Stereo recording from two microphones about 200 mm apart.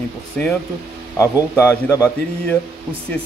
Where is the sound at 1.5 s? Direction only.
10° left (ahead or behind).